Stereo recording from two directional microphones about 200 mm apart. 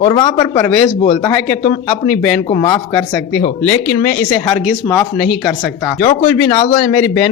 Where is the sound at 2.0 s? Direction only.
5° left (ahead or behind).